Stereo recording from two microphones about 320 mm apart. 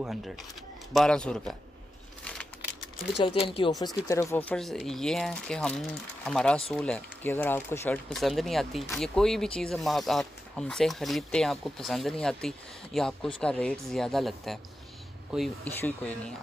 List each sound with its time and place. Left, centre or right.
0.9 s speech: centre
3.2 s speech: centre